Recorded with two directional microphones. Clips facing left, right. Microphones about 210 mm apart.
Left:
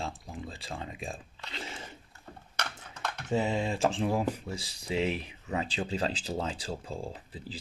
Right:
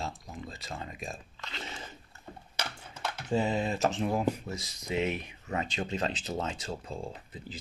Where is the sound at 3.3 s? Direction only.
25° left (ahead or behind).